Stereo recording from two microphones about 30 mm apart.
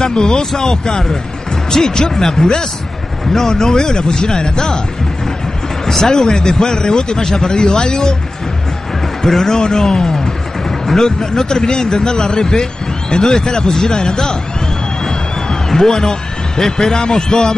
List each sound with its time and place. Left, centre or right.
0.2 s speech: left
5.9 s speech: centre
9.2 s a man's voice: centre
15.7 s a man's voice: centre